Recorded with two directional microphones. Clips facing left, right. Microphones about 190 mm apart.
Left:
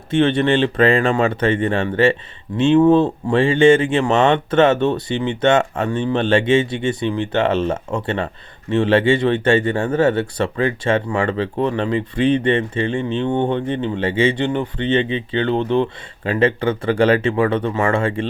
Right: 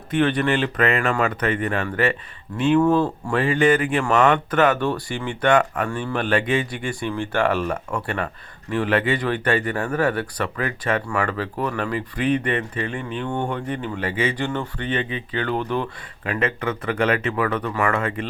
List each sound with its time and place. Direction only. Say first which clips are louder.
0.1 s speech: left 4 dB; 25° left (ahead or behind)